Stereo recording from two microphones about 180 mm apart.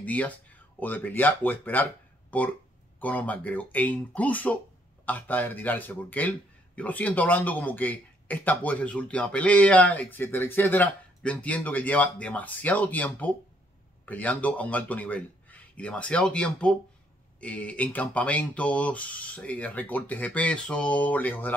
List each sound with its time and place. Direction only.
0.0 s speech: 10° left (ahead or behind)